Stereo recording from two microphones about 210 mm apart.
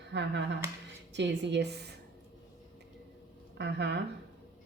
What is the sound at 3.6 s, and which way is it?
Speech, 55° right (ahead or behind).